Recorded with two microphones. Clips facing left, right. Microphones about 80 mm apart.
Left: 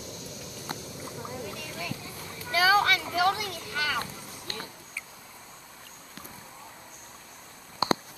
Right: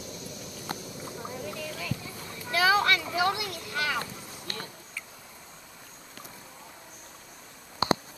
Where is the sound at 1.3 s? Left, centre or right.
Left.